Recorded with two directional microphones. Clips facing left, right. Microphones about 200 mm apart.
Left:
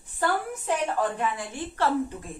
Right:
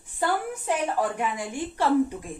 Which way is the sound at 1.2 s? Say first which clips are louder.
Right 1 dB; 15° right (ahead or behind).